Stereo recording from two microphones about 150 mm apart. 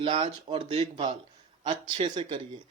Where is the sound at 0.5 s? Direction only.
45° right (ahead or behind).